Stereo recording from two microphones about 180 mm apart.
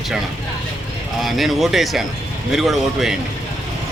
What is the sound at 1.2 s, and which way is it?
Speech, centre (ahead or behind).